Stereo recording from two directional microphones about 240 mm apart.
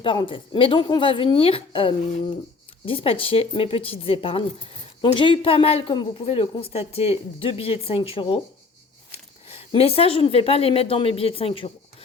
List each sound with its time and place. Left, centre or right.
0.0 s a woman's voice: left